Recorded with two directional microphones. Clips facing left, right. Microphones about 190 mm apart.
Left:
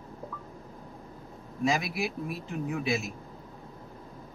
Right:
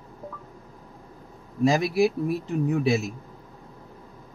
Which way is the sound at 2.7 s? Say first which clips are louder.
Right 7 dB; 40° right (ahead or behind).